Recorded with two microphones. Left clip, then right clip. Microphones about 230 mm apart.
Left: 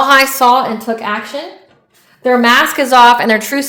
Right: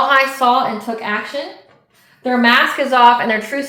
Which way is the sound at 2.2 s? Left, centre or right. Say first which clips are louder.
Left 3 dB; left.